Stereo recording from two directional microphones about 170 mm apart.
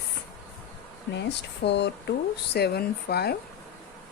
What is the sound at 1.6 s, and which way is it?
Speech, 90° left.